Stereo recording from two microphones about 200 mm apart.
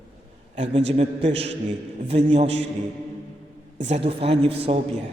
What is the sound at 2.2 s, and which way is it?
Speech, 30° right (ahead or behind).